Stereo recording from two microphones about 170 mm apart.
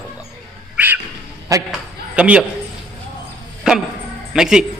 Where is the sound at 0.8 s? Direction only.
10° right (ahead or behind).